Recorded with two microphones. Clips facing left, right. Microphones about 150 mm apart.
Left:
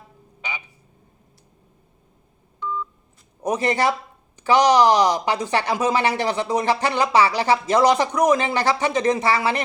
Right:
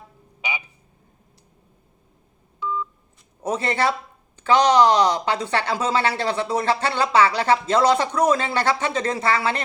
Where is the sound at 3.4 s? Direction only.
15° left (ahead or behind).